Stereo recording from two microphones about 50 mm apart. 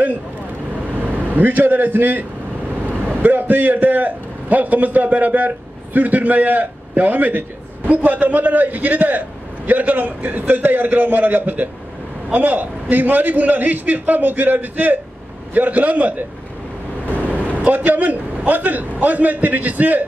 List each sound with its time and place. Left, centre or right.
1.0 s a man's voice: right
17.3 s a man's voice: right